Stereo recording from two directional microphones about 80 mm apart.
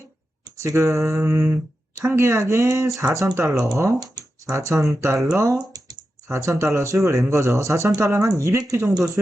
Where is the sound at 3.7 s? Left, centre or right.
Right.